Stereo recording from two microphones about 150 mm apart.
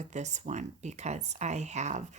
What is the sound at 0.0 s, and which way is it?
Speech, 50° right (ahead or behind).